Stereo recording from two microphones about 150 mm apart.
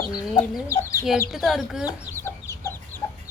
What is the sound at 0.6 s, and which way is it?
Speech, 20° left (ahead or behind).